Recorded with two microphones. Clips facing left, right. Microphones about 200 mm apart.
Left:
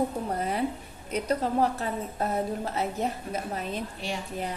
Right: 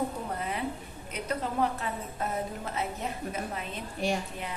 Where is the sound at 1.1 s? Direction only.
35° left (ahead or behind).